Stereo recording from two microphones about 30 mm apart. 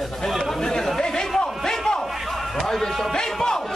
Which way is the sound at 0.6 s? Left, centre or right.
Centre.